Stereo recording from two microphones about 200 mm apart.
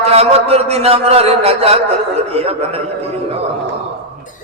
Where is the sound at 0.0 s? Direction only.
30° right (ahead or behind).